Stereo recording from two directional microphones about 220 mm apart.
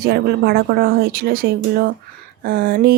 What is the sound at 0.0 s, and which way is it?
Speech, 45° right (ahead or behind).